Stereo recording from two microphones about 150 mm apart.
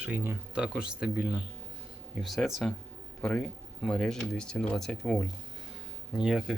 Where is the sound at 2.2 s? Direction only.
Centre (ahead or behind).